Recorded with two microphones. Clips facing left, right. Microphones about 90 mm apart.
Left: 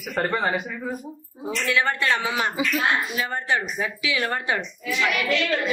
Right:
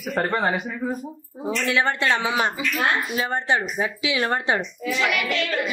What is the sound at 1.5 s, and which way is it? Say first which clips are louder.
A woman's voice: right 1 dB; 25° right (ahead or behind).